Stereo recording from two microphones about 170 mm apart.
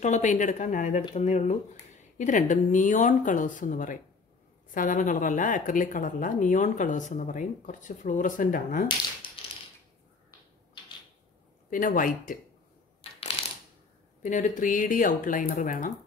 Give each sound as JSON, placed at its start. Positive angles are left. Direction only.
{"t": 0.0, "sound": "speech", "side_deg": 45}
{"t": 9.4, "sound": "typewriter", "side_deg": 30}
{"t": 11.7, "sound": "speech", "side_deg": 50}
{"t": 14.2, "sound": "speech", "side_deg": 50}